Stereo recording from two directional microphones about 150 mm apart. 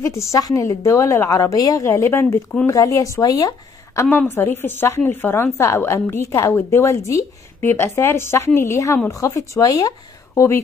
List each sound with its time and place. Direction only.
0.0 s a woman's voice: 20° left (ahead or behind)